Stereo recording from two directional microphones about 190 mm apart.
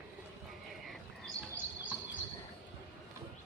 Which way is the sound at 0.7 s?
Centre (ahead or behind).